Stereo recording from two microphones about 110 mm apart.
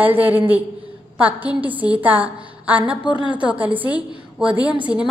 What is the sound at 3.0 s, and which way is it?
Speech, 45° left (ahead or behind).